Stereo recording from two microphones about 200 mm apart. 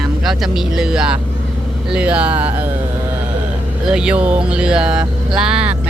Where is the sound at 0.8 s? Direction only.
5° right (ahead or behind).